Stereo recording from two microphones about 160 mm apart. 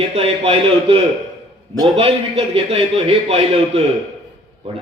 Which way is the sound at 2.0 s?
35° right (ahead or behind).